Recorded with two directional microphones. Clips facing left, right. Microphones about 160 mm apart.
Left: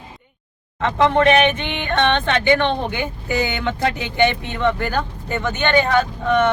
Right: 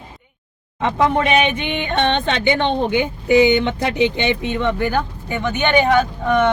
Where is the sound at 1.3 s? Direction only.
15° right (ahead or behind).